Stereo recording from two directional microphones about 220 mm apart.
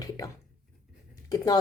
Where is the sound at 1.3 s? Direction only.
15° left (ahead or behind).